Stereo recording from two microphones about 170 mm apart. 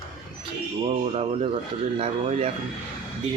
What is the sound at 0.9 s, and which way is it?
Speech, 35° right (ahead or behind).